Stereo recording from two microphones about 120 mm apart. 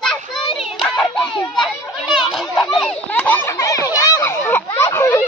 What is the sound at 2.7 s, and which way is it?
Children playing, 10° left (ahead or behind).